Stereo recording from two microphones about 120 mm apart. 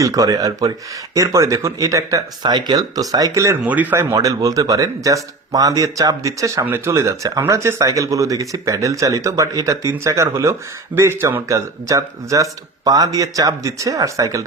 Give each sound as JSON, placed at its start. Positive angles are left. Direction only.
{"t": 0.0, "sound": "speech", "side_deg": -30}
{"t": 3.6, "sound": "speech", "side_deg": -15}
{"t": 4.1, "sound": "speech", "side_deg": -30}